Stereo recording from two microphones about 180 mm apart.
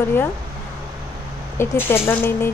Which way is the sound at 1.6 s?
10° left (ahead or behind).